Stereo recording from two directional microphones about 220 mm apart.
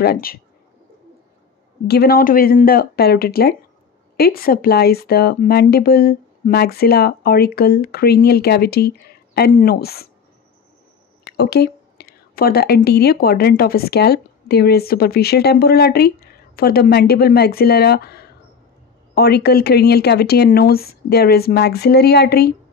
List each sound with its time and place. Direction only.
0.0 s speech: 45° left (ahead or behind)
1.9 s speech: 45° left (ahead or behind)
11.2 s speech: 45° left (ahead or behind)